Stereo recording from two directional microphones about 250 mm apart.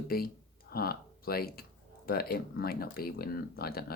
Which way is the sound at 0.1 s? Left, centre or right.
Left.